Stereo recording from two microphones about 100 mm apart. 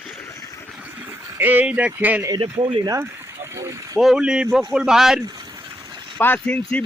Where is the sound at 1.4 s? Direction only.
20° right (ahead or behind).